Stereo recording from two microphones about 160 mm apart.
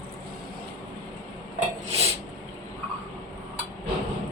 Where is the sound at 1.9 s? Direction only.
40° right (ahead or behind).